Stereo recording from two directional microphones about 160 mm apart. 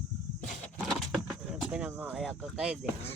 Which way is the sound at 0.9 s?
Centre (ahead or behind).